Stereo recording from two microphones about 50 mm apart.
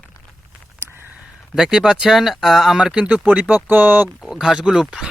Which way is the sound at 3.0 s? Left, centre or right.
Right.